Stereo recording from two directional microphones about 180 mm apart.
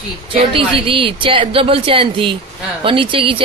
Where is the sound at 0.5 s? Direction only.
30° right (ahead or behind).